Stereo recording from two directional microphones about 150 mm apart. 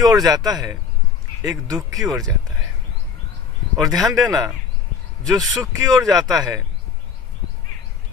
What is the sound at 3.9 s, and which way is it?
Speech, 25° right (ahead or behind).